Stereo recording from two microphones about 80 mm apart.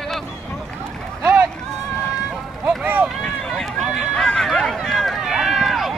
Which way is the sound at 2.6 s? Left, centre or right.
Right.